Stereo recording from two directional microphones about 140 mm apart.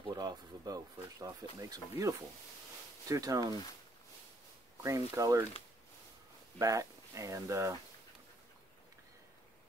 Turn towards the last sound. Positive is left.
turn(degrees=-20)  # may be behind; listen again after turning